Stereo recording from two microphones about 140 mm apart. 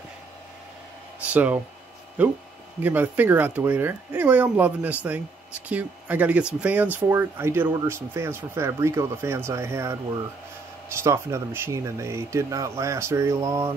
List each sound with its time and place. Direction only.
1.3 s speech: 10° right (ahead or behind)